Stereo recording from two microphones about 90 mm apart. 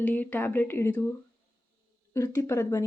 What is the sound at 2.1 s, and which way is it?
Speech, 35° left (ahead or behind).